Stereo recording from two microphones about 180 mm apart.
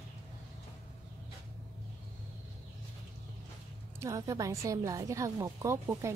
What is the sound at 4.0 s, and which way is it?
A woman's voice, 20° right (ahead or behind).